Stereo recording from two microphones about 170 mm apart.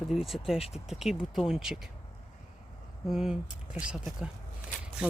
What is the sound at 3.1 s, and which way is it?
Speech, 5° right (ahead or behind).